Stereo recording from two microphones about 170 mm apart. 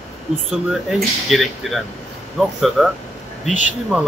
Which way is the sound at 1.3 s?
Centre (ahead or behind).